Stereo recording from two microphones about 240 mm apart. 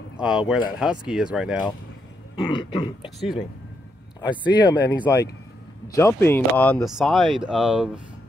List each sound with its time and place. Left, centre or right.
0.2 s speech: centre
2.3 s throat clearing: centre
4.2 s speech: centre